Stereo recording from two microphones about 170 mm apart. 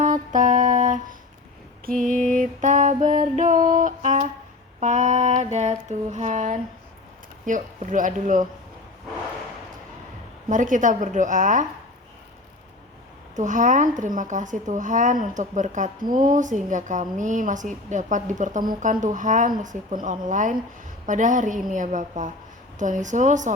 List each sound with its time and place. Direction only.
0.0 s mantra: 50° right (ahead or behind)
2.0 s music: 50° right (ahead or behind)
4.8 s speech: 45° right (ahead or behind)
10.5 s speech: 50° right (ahead or behind)
13.3 s speech: 45° right (ahead or behind)